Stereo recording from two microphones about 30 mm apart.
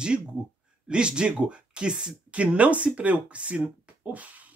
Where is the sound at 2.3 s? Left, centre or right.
Right.